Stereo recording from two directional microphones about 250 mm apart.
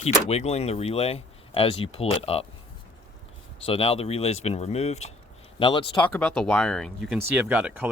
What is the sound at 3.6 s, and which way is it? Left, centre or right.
Speech, left.